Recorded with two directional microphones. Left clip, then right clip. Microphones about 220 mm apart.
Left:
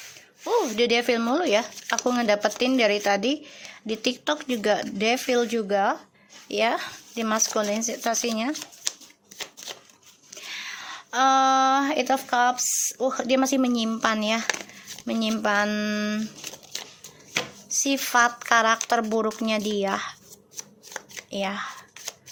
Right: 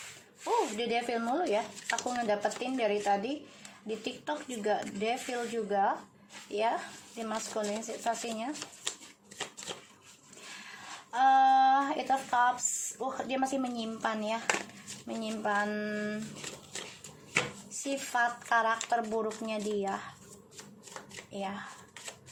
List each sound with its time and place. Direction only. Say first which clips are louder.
0.4 s speech: left 8 dB; 40° left (ahead or behind)
11.1 s speech: left 4 dB; 40° left (ahead or behind)
17.3 s speech: left 5 dB; 35° left (ahead or behind)
21.3 s speech: left 9 dB; 45° left (ahead or behind)